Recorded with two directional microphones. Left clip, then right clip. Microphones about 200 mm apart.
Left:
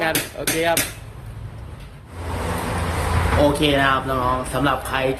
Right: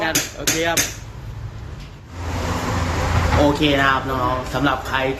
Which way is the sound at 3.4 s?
15° left (ahead or behind).